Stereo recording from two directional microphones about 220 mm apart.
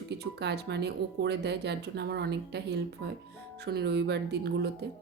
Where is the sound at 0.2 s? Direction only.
50° right (ahead or behind).